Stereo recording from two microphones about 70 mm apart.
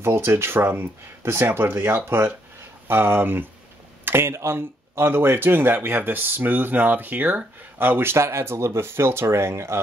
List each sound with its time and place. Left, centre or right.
0.0 s speech: right